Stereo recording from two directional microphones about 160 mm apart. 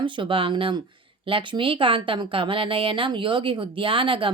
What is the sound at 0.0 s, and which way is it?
Speech, 30° right (ahead or behind).